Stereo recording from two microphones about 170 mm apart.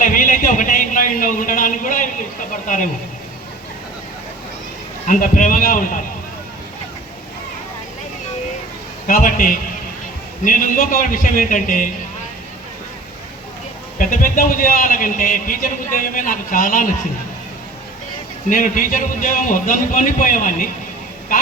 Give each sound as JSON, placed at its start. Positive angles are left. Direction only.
{"t": 0.0, "sound": "a sound", "side_deg": 50}
{"t": 5.0, "sound": "speech", "side_deg": 50}
{"t": 9.0, "sound": "speech", "side_deg": 50}
{"t": 14.1, "sound": "speech", "side_deg": 55}
{"t": 18.4, "sound": "speech", "side_deg": 50}